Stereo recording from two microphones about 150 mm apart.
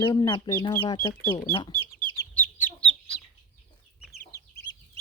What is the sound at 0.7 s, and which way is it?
Speech, 15° left (ahead or behind).